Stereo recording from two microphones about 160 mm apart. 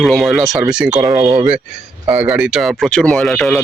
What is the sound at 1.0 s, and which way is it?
Speech, 20° right (ahead or behind).